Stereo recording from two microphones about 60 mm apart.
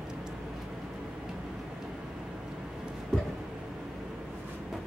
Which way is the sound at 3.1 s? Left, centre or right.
Centre.